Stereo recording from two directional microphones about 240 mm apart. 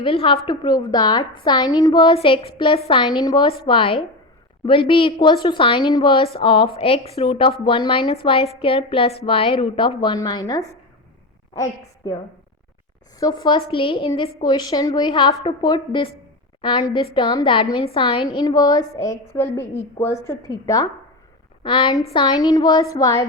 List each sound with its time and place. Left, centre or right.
0.0 s a woman's voice: left
13.1 s a woman's voice: centre
21.6 s a woman's voice: left